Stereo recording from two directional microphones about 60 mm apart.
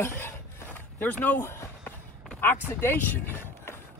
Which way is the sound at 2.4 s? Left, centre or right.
Left.